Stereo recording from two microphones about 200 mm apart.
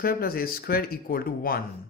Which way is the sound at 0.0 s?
50° left (ahead or behind).